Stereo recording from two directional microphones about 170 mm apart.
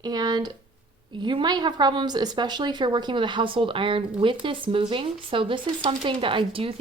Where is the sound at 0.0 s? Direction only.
25° right (ahead or behind).